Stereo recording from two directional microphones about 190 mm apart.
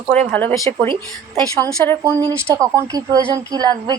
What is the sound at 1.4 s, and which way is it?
A woman's voice, 15° right (ahead or behind).